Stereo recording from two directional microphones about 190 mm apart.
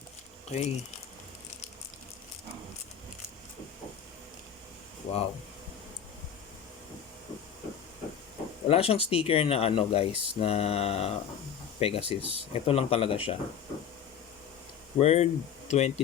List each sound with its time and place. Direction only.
0.4 s speech: 35° left (ahead or behind)
5.1 s speech: 35° left (ahead or behind)
8.6 s speech: 30° left (ahead or behind)
14.9 s speech: 35° left (ahead or behind)